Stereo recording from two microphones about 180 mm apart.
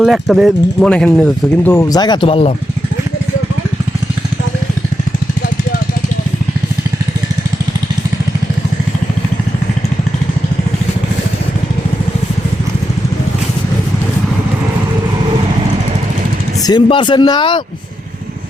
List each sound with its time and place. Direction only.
0.0 s speech: centre (ahead or behind)
1.7 s speech: 20° left (ahead or behind)
16.6 s speech: 25° left (ahead or behind)